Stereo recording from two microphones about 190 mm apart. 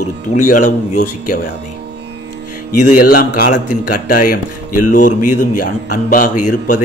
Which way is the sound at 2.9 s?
45° left (ahead or behind).